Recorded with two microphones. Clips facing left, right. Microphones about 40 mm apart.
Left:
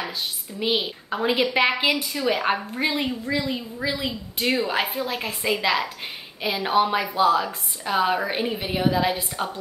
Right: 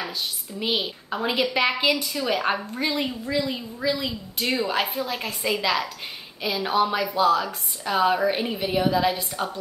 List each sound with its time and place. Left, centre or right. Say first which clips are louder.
0.6 s a woman's voice: left 2 dB; centre
2.7 s a woman's voice: left 1 dB; left
3.1 s a woman's voice: left 1 dB; centre